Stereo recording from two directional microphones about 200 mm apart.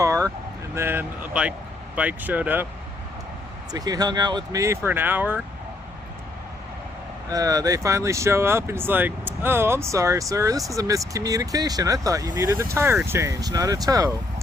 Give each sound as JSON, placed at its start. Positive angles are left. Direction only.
{"t": 0.0, "sound": "vehicle", "side_deg": -15}
{"t": 0.8, "sound": "speech", "side_deg": -10}
{"t": 3.7, "sound": "speech", "side_deg": -20}
{"t": 7.3, "sound": "speech", "side_deg": -15}